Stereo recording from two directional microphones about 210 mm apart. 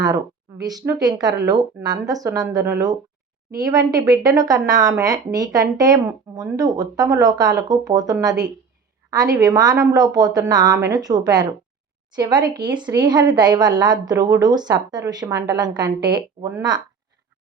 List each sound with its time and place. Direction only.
0.6 s a woman's voice: 20° right (ahead or behind)